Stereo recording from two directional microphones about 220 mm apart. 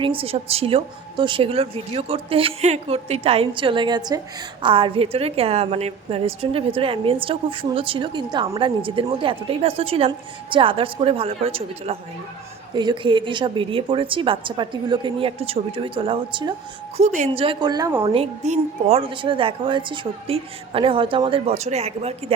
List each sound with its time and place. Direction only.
0.0 s a woman's voice: 25° right (ahead or behind)